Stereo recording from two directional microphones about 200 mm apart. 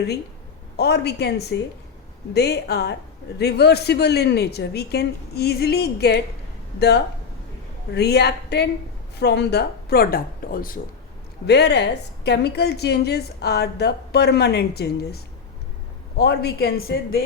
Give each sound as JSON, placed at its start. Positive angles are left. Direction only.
{"t": 0.8, "sound": "a woman's voice", "side_deg": 55}
{"t": 11.4, "sound": "a woman's voice", "side_deg": 55}